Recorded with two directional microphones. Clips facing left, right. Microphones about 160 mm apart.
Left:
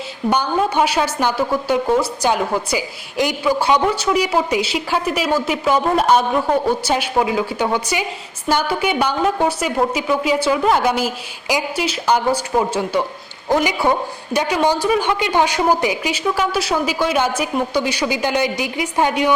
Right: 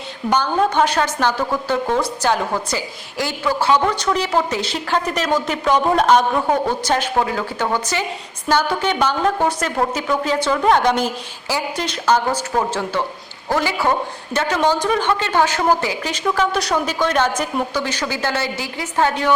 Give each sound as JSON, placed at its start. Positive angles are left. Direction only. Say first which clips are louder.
{"t": 0.3, "sound": "a woman's voice", "louder": "even", "side_deg": 10}